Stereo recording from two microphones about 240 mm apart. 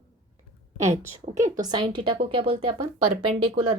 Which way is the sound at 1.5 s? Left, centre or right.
Centre.